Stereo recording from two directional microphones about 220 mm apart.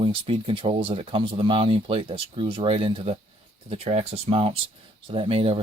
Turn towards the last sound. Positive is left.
turn(degrees=-25)  # may be behind; listen again after turning